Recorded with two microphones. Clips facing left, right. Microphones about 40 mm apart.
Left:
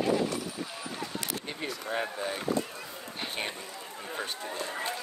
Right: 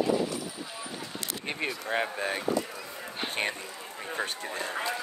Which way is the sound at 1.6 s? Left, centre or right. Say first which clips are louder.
Right 3 dB; right.